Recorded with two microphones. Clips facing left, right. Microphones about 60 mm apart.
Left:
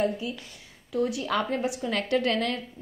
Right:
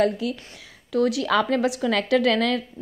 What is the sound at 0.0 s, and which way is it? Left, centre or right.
A woman's voice, right.